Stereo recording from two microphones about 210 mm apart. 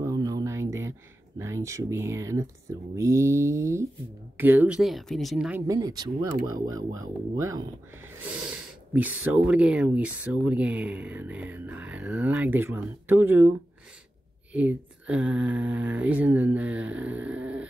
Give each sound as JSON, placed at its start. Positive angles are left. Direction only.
{"t": 0.0, "sound": "a sound", "side_deg": -15}
{"t": 1.4, "sound": "speech", "side_deg": -15}
{"t": 5.7, "sound": "speech", "side_deg": -20}
{"t": 14.5, "sound": "speech", "side_deg": -5}